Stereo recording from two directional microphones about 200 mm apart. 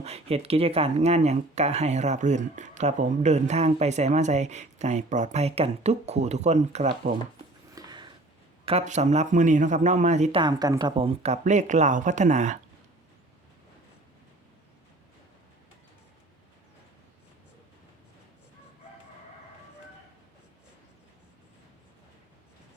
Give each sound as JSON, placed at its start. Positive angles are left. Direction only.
{"t": 0.0, "sound": "speech", "side_deg": -30}
{"t": 7.8, "sound": "a sound", "side_deg": -20}
{"t": 8.6, "sound": "speech", "side_deg": -35}
{"t": 10.4, "sound": "speech", "side_deg": -20}